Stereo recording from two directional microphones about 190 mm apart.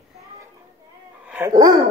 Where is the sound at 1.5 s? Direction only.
20° right (ahead or behind).